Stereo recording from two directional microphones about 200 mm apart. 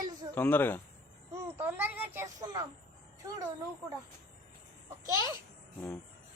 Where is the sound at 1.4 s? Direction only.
10° right (ahead or behind).